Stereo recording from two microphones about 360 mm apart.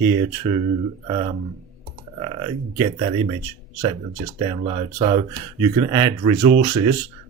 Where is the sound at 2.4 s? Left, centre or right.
Centre.